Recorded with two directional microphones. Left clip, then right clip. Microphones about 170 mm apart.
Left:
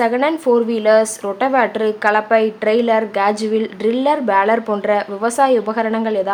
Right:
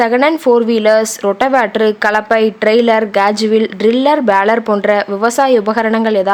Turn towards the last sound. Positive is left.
turn(degrees=-35)  # may be behind; listen again after turning